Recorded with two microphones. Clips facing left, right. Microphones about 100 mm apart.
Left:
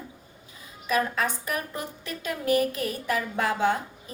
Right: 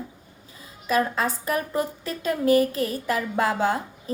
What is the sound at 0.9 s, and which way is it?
A woman's voice, 35° right (ahead or behind).